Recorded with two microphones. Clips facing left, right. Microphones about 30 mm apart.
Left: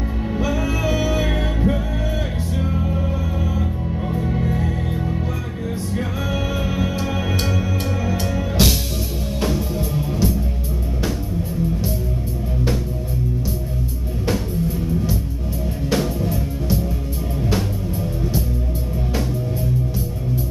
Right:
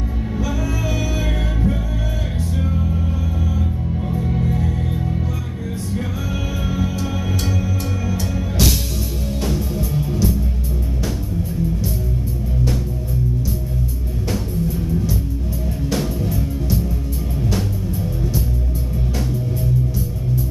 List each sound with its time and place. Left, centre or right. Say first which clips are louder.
0.4 s music: left 2 dB; centre
4.1 s music: even; centre
6.7 s music: even; left
8.1 s music: left 1 dB; left
9.9 s music: right 1 dB; centre
14.3 s music: even; centre